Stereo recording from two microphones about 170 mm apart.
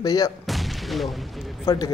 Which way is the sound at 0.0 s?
20° left (ahead or behind).